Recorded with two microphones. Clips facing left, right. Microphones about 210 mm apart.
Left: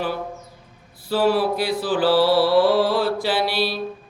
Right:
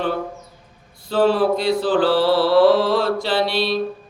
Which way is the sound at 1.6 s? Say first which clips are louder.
Right 3 dB; 25° right (ahead or behind).